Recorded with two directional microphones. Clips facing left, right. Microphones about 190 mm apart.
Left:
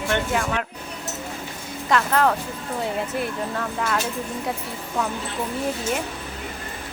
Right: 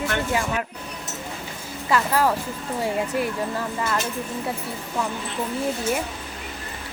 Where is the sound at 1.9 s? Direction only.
5° right (ahead or behind).